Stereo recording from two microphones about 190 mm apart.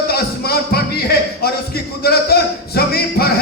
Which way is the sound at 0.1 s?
55° left (ahead or behind).